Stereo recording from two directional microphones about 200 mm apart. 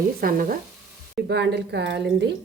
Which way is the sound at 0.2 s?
45° right (ahead or behind).